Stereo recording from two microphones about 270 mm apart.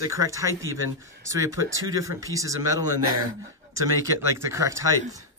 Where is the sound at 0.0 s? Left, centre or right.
Centre.